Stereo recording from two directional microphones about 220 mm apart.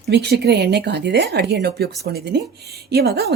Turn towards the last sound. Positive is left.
turn(degrees=-45)  # may be behind; listen again after turning